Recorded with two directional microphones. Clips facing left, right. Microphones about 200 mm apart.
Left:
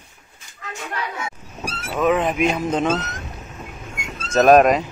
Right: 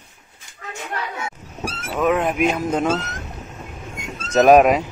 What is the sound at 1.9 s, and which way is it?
Speech, 5° right (ahead or behind).